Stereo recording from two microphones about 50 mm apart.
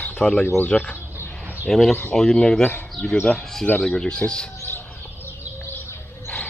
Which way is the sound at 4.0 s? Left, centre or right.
Centre.